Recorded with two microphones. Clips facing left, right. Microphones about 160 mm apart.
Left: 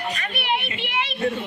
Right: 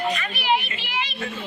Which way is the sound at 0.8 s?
60° left (ahead or behind).